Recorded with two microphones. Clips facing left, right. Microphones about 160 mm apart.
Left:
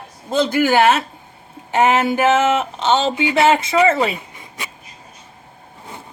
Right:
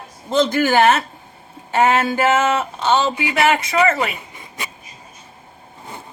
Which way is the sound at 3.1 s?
25° left (ahead or behind).